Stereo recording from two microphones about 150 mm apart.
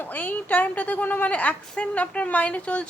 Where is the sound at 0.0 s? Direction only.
10° left (ahead or behind).